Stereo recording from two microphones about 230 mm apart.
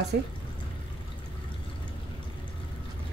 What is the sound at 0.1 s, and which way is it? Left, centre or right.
Speech, right.